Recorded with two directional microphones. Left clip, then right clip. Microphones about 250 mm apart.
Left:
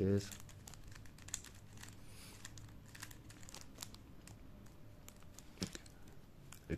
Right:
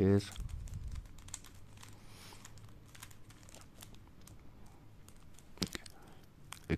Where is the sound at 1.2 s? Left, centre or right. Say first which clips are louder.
Left 2 dB; centre.